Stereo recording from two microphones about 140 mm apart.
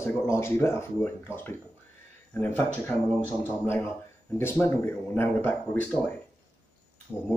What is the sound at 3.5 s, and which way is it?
Speech, 15° left (ahead or behind).